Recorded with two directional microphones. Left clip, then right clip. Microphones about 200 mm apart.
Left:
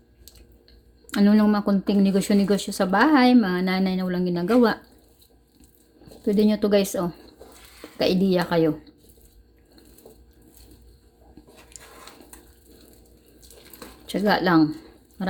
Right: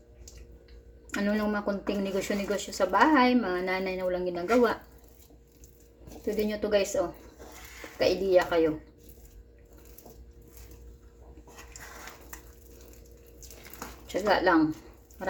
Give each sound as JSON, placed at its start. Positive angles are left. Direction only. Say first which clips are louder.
{"t": 1.1, "sound": "speech", "louder": "left 8 dB", "side_deg": 45}
{"t": 6.2, "sound": "speech", "louder": "left 8 dB", "side_deg": 50}
{"t": 14.1, "sound": "speech", "louder": "left 3 dB", "side_deg": 50}